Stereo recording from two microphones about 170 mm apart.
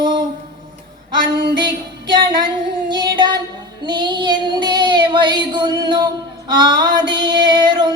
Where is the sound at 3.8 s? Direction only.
25° right (ahead or behind).